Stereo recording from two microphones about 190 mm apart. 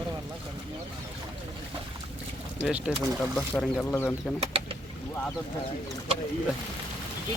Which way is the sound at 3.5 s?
10° left (ahead or behind).